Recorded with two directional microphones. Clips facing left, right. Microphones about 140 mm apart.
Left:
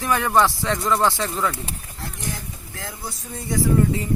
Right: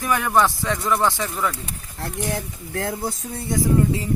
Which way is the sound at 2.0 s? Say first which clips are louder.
Right 6 dB; 65° right (ahead or behind).